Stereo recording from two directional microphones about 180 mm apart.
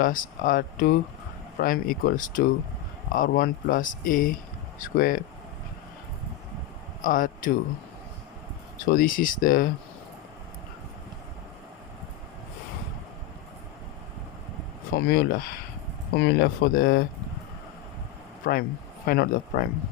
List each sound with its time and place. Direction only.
0.0 s speech: 50° left (ahead or behind)
7.0 s speech: 50° left (ahead or behind)
8.9 s speech: 50° left (ahead or behind)
14.9 s speech: 60° left (ahead or behind)
18.5 s speech: 60° left (ahead or behind)